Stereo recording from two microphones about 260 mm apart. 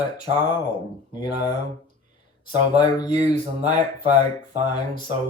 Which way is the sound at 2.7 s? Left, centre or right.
Centre.